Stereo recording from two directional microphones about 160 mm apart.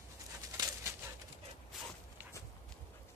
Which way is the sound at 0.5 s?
20° right (ahead or behind).